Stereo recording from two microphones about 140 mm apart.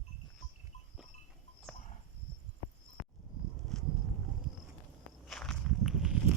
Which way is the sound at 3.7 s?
5° left (ahead or behind).